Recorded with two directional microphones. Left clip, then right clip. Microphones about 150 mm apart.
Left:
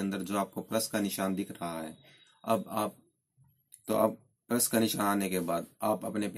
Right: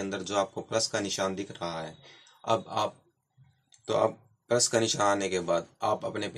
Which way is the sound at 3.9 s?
40° left (ahead or behind).